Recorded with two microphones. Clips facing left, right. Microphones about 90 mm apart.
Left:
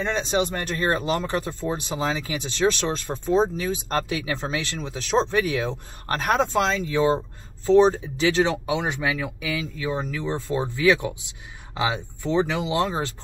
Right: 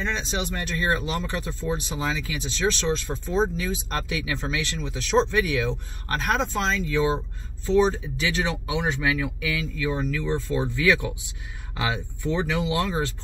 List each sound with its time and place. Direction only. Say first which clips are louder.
0.0 s speech: left 5 dB; 50° left (ahead or behind)
3.3 s speech: left 3 dB; 40° left (ahead or behind)
6.2 s speech: left 4 dB; 50° left (ahead or behind)
7.6 s speech: left 4 dB; 35° left (ahead or behind)